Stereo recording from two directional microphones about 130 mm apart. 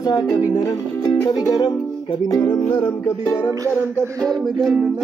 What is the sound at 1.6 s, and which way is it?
Music, 35° left (ahead or behind).